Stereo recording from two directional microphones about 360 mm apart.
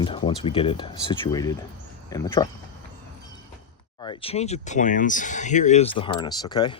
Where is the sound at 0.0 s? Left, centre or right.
Centre.